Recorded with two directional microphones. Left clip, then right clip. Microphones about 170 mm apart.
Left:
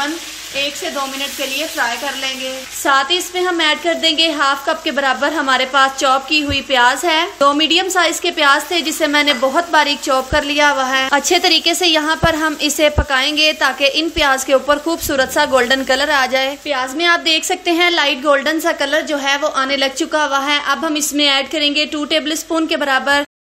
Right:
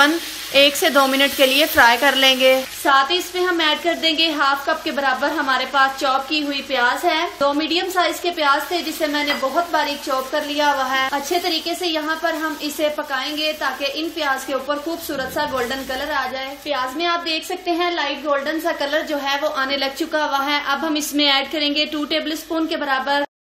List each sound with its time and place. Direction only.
0.5 s speech: 45° right (ahead or behind)
2.8 s a woman's voice: 25° left (ahead or behind); by 16.4 s 50° left (ahead or behind)
16.6 s a woman's voice: 40° left (ahead or behind)